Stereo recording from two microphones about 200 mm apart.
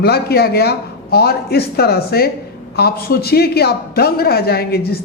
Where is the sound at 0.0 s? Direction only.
50° left (ahead or behind).